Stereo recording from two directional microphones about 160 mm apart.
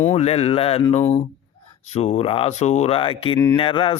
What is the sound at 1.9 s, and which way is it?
A man's voice, 40° left (ahead or behind).